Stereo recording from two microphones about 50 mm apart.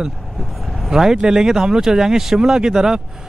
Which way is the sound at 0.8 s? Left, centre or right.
Centre.